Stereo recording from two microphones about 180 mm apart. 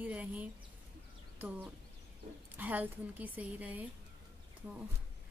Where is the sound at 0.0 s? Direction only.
10° right (ahead or behind).